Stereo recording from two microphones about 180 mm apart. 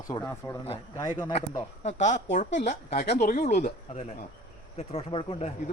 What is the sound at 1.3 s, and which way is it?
Speech, 35° left (ahead or behind).